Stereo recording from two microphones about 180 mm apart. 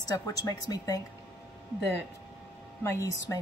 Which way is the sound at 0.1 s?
20° left (ahead or behind).